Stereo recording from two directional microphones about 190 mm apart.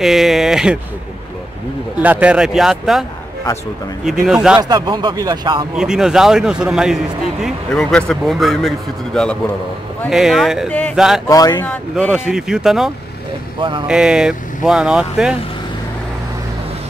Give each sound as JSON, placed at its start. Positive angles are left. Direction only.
{"t": 0.0, "sound": "speech", "side_deg": 0}
{"t": 2.0, "sound": "speech", "side_deg": -10}
{"t": 4.6, "sound": "speech", "side_deg": -20}
{"t": 5.8, "sound": "speech", "side_deg": -5}
{"t": 11.2, "sound": "speech", "side_deg": 20}
{"t": 11.6, "sound": "speech", "side_deg": 5}
{"t": 13.6, "sound": "speech", "side_deg": -25}
{"t": 13.8, "sound": "speech", "side_deg": -5}